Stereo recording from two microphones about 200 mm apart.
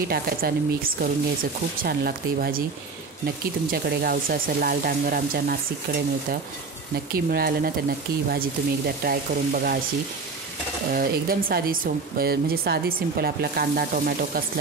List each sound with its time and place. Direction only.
0.1 s speech: 45° right (ahead or behind)
7.1 s speech: 50° right (ahead or behind)
10.9 s speech: 45° right (ahead or behind)